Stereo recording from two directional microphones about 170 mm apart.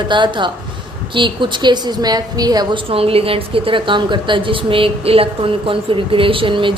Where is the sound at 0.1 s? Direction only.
30° right (ahead or behind).